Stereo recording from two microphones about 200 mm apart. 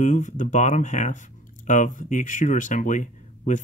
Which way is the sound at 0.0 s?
40° left (ahead or behind).